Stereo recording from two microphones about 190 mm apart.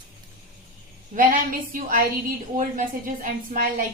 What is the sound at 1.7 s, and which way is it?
A woman's voice, 45° right (ahead or behind).